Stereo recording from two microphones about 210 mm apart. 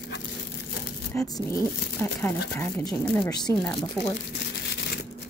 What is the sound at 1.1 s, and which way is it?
A woman's voice, 15° left (ahead or behind).